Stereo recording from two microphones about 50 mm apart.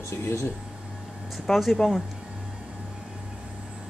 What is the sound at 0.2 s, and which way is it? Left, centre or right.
Speech, left.